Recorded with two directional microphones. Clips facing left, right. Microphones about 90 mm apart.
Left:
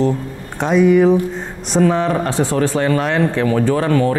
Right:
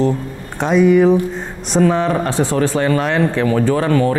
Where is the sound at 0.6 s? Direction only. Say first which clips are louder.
Even; 25° right (ahead or behind).